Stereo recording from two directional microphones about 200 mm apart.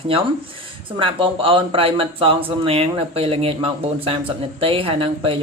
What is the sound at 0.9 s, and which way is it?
Speech, 25° right (ahead or behind).